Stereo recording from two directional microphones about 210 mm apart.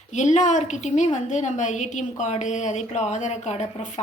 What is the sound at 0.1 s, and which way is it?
A woman's voice, 35° left (ahead or behind).